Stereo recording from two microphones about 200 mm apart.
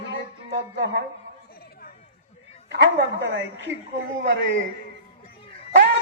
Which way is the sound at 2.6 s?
60° right (ahead or behind).